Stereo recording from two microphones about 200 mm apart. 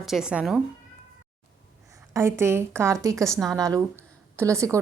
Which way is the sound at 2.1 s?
15° right (ahead or behind).